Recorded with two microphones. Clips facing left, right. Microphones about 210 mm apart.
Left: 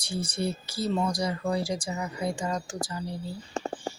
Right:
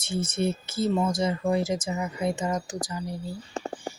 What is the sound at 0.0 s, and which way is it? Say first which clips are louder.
Speech: right 3 dB; 25° right (ahead or behind).